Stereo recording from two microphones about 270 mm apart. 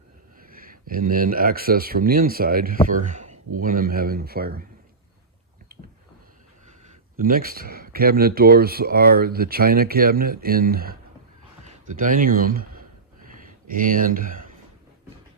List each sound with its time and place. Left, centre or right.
0.4 s speech: right
7.2 s speech: right
13.2 s a sound: right